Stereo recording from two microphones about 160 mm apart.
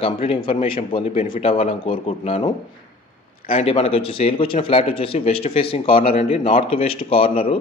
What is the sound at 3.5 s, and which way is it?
A man's voice, 40° left (ahead or behind).